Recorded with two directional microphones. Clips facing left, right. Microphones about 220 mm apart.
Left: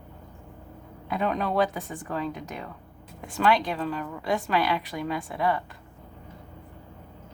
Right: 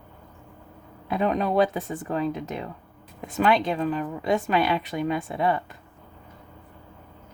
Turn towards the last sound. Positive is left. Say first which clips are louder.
# right 2 dB
turn(degrees=-25)  # may be behind; listen again after turning